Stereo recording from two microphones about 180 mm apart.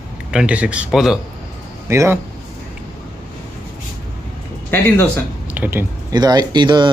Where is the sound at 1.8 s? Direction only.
15° right (ahead or behind).